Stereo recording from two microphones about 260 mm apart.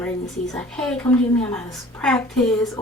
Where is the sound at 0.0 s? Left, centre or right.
Centre.